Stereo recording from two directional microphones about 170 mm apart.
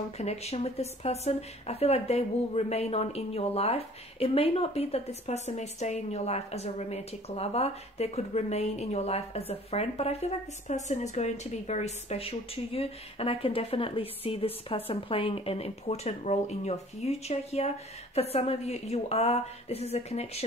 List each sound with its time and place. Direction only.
0.2 s a woman's voice: 40° left (ahead or behind)